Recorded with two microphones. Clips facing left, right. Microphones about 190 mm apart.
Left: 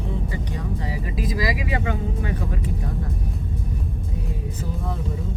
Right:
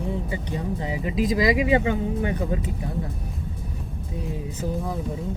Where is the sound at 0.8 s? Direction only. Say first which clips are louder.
Right 4 dB; 20° right (ahead or behind).